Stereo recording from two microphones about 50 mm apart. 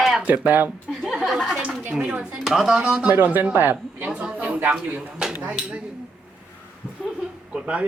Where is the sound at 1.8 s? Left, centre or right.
Right.